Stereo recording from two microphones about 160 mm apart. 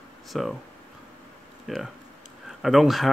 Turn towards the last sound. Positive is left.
turn(degrees=0)  # may be behind; listen again after turning